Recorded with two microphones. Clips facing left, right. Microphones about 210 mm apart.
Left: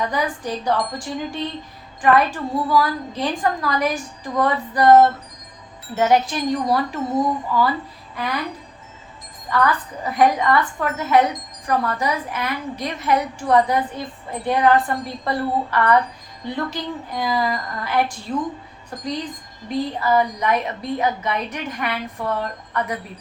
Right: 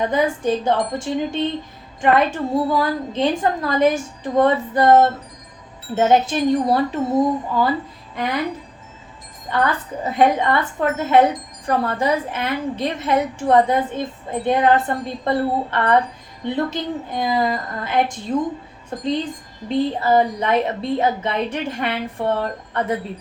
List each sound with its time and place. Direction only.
0.0 s a woman's voice: 25° right (ahead or behind)
2.0 s a woman's voice: 25° right (ahead or behind)
9.5 s a woman's voice: 25° right (ahead or behind)